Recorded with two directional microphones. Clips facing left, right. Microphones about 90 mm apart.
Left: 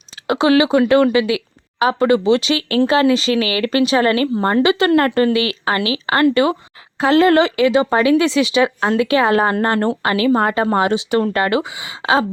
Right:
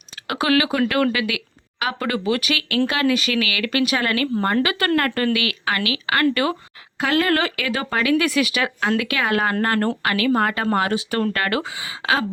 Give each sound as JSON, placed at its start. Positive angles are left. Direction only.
{"t": 0.3, "sound": "speech", "side_deg": 25}